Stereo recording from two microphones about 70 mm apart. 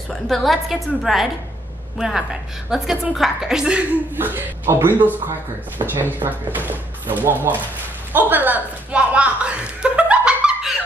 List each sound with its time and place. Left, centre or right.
0.1 s a woman's voice: centre
4.1 s speech: right
8.1 s chuckle: right; by 10.8 s centre